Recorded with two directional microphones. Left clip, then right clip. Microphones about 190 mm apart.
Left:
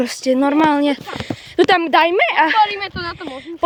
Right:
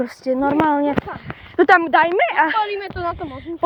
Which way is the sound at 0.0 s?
50° left (ahead or behind).